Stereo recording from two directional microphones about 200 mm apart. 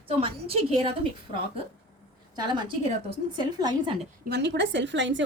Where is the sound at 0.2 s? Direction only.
30° right (ahead or behind).